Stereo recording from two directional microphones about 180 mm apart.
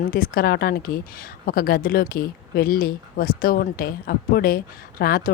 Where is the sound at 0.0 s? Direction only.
55° left (ahead or behind).